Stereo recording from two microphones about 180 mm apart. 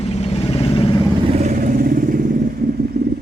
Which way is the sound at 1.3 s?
40° right (ahead or behind).